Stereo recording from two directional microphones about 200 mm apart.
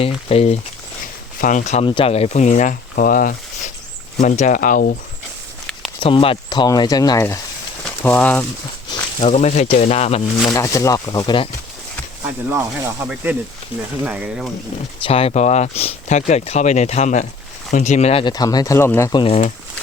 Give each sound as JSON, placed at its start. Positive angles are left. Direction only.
{"t": 0.0, "sound": "speech", "side_deg": 30}
{"t": 6.0, "sound": "speech", "side_deg": 25}
{"t": 8.0, "sound": "speech", "side_deg": 5}
{"t": 8.9, "sound": "speech", "side_deg": 35}
{"t": 10.5, "sound": "speech", "side_deg": 15}
{"t": 12.2, "sound": "speech", "side_deg": -10}
{"t": 15.0, "sound": "speech", "side_deg": 30}
{"t": 19.2, "sound": "speech", "side_deg": 35}